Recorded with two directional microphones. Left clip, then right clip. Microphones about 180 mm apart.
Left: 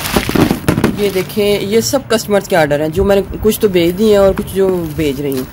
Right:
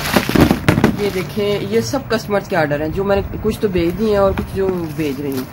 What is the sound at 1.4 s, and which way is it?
Speech, 50° left (ahead or behind).